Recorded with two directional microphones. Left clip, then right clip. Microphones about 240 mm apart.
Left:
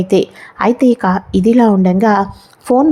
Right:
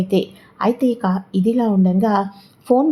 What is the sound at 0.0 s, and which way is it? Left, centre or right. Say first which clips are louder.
A woman's voice: left 7 dB; left.